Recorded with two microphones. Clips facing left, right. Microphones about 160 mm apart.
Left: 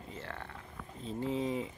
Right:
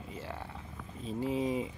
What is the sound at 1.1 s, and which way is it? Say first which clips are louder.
Speech: right 2 dB; 15° right (ahead or behind).